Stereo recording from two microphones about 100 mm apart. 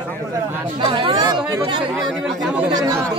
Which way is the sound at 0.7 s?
55° right (ahead or behind).